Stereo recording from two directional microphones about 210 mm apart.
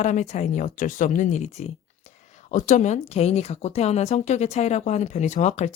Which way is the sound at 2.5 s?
35° left (ahead or behind).